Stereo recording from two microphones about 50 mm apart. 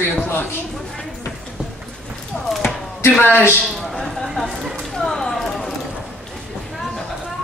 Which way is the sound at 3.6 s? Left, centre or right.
Centre.